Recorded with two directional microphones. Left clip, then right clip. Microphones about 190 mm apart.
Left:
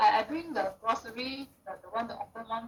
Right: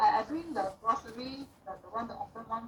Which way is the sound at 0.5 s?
35° left (ahead or behind).